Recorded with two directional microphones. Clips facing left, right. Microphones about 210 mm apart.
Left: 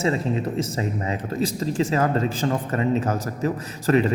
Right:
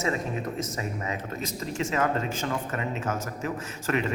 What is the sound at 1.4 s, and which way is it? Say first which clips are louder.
A man's voice: left 11 dB; 35° left (ahead or behind).